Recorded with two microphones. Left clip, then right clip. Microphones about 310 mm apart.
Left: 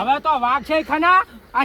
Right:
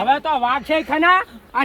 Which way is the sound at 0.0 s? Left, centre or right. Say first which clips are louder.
Even; centre.